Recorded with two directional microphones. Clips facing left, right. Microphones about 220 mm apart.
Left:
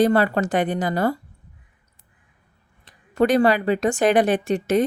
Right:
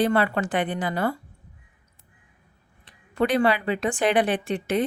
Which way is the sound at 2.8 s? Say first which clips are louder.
Left 5 dB; 40° left (ahead or behind).